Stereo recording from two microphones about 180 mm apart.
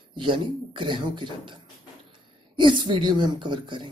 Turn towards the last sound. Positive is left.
turn(degrees=-25)  # may be behind; listen again after turning